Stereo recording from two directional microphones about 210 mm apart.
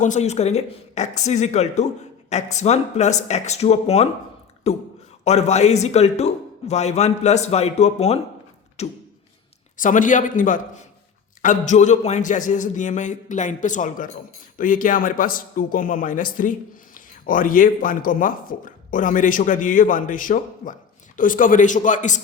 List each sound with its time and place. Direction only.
0.0 s a man's voice: 35° left (ahead or behind)